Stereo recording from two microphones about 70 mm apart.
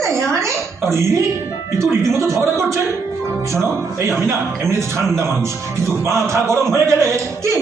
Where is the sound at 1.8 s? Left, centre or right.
Right.